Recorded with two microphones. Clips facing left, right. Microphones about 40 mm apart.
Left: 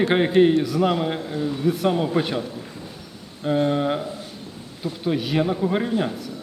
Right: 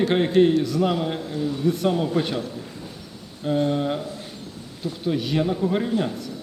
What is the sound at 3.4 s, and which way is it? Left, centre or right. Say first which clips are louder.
A man's voice: left 2 dB; centre.